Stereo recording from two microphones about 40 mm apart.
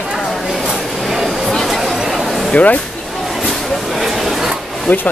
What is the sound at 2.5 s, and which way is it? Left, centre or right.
Speech, left.